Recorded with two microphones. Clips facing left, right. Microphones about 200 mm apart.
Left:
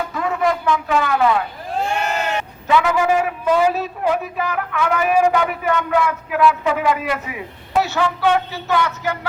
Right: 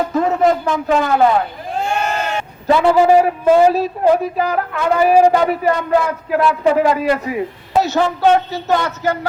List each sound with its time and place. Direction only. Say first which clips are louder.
0.0 s a sound: right 6 dB; 40° right (ahead or behind)
1.0 s a woman's voice: right 4 dB; 40° right (ahead or behind)
2.6 s a woman's voice: right 5 dB; 35° right (ahead or behind)